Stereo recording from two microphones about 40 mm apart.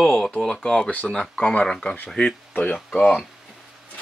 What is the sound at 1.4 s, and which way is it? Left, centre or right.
Speech, left.